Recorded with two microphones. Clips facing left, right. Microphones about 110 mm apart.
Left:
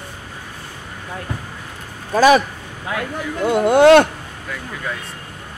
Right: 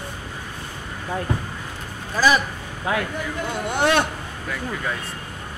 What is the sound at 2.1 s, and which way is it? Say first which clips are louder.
Speech: left 7 dB; 65° left (ahead or behind).